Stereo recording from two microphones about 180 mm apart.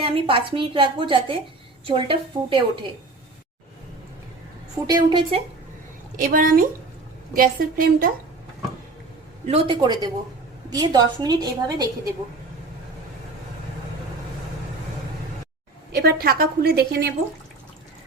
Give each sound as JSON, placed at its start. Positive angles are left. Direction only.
{"t": 0.0, "sound": "a woman's voice", "side_deg": -30}
{"t": 4.9, "sound": "a woman's voice", "side_deg": -25}
{"t": 6.1, "sound": "a woman's voice", "side_deg": -50}
{"t": 9.5, "sound": "a woman's voice", "side_deg": -30}
{"t": 15.9, "sound": "a woman's voice", "side_deg": -60}